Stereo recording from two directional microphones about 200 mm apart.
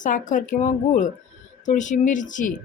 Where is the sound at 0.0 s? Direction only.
40° left (ahead or behind).